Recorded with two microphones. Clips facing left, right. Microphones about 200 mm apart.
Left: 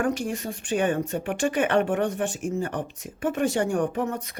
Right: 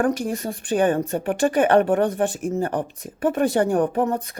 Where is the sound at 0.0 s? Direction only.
45° right (ahead or behind).